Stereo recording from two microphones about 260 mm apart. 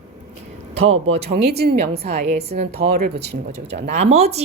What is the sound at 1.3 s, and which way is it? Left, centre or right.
Speech, right.